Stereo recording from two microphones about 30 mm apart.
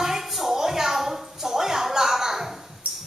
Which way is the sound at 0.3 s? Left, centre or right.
Centre.